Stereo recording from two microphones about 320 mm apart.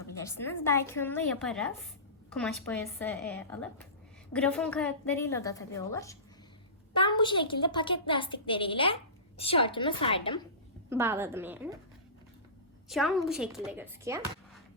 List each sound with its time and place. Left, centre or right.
0.0 s a woman's voice: centre
10.8 s a woman's voice: centre
12.9 s a woman's voice: centre